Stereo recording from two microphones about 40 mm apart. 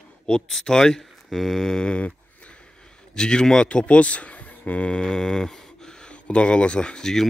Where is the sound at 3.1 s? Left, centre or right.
Centre.